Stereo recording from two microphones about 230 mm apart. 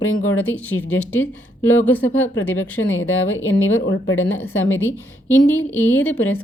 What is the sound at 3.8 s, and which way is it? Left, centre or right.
Speech, left.